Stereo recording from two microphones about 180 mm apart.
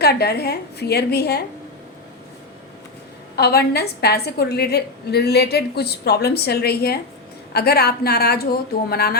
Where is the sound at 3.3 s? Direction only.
60° left (ahead or behind).